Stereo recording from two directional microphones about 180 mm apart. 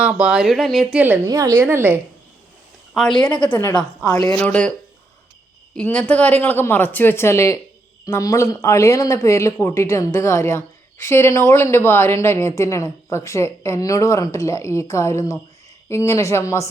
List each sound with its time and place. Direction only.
0.0 s a woman's voice: 5° right (ahead or behind)
2.9 s a woman's voice: 5° left (ahead or behind)
5.7 s speech: 5° left (ahead or behind)